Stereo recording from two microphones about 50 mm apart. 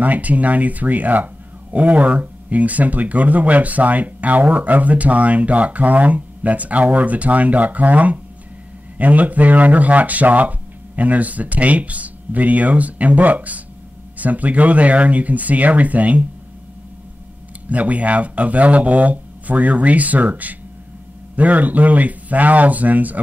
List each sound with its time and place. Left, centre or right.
0.0 s speech: right
17.6 s speech: right